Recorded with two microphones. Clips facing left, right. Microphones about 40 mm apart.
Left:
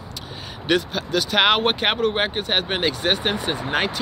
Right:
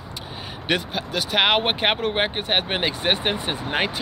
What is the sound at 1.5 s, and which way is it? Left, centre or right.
Speech, right.